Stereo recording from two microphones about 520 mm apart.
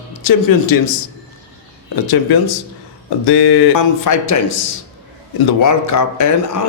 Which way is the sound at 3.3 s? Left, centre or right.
Left.